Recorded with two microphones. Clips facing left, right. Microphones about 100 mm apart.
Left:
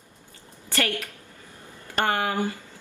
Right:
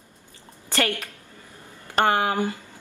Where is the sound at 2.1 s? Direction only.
20° right (ahead or behind).